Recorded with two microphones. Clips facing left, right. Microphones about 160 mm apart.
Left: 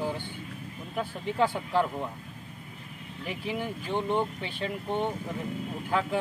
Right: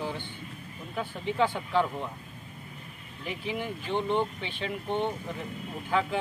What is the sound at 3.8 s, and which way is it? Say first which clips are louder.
Speech: right 1 dB; 10° left (ahead or behind).